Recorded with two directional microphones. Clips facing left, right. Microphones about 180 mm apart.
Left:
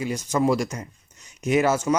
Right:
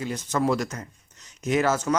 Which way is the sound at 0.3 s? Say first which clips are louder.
Left 2 dB; 10° left (ahead or behind).